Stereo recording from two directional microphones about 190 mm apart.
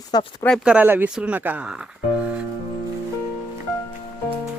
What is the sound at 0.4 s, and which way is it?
Speech, centre (ahead or behind).